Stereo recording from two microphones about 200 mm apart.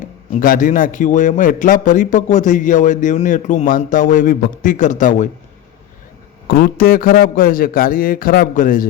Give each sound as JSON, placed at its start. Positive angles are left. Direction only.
{"t": 0.0, "sound": "a man's voice", "side_deg": 40}
{"t": 6.5, "sound": "a man's voice", "side_deg": 50}